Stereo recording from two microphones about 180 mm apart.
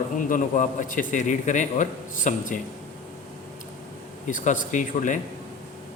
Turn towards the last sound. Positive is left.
turn(degrees=45)  # may be behind; listen again after turning